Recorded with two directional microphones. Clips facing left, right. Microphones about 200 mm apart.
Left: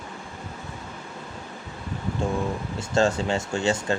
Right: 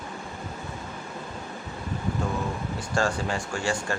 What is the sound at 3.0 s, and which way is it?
Speech, 25° left (ahead or behind).